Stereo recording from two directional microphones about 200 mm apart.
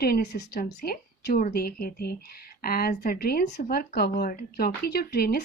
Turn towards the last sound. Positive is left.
turn(degrees=50)  # may be behind; listen again after turning